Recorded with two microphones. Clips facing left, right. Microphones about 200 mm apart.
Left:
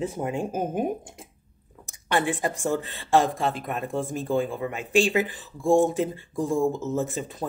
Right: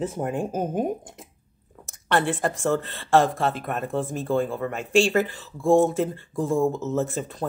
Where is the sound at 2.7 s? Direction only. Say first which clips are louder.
Right 2 dB; 15° left (ahead or behind).